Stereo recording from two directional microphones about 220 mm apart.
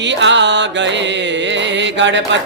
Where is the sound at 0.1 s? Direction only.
55° right (ahead or behind).